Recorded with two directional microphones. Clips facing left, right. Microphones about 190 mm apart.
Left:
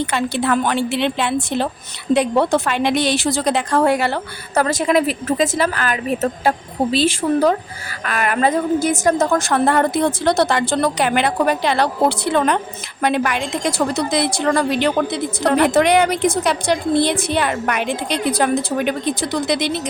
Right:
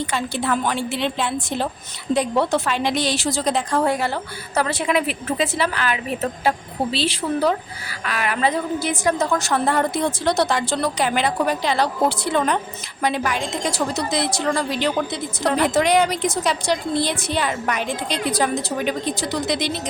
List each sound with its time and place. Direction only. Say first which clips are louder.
0.1 s a woman's voice: left 4 dB; 65° left (ahead or behind)
2.1 s a woman's voice: left 4 dB; 55° left (ahead or behind); by 4.2 s 70° left (ahead or behind)
4.5 s a woman's voice: left 4 dB; 45° left (ahead or behind)